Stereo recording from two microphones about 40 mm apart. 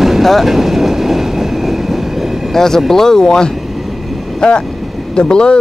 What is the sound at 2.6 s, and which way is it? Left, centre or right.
Speech, centre.